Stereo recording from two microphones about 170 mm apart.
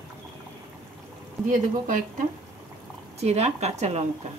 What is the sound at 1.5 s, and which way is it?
Speech, 50° right (ahead or behind).